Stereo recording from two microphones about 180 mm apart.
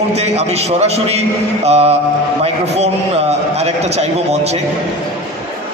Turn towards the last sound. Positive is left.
turn(degrees=-35)  # may be behind; listen again after turning